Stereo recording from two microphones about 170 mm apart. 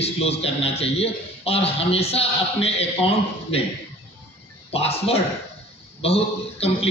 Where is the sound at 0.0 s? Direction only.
35° left (ahead or behind).